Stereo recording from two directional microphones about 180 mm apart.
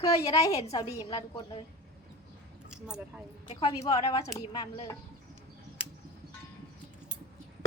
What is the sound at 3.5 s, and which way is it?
A woman's voice, 30° left (ahead or behind).